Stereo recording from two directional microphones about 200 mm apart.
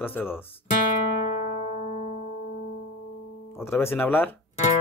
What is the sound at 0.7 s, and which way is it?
Music, 40° left (ahead or behind).